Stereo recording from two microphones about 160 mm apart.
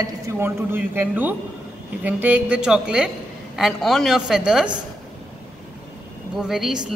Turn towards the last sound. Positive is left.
turn(degrees=-5)  # may be behind; listen again after turning